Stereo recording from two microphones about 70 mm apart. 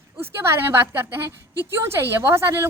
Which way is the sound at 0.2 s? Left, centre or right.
Right.